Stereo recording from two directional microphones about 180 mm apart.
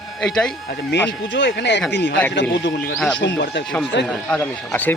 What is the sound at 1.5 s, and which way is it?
A man's voice, 75° left (ahead or behind).